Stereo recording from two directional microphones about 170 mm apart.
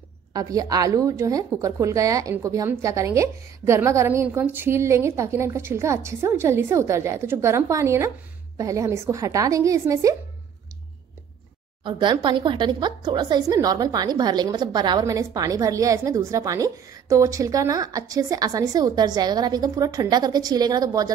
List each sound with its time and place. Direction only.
0.3 s a woman's voice: 20° right (ahead or behind)
11.8 s speech: 25° right (ahead or behind)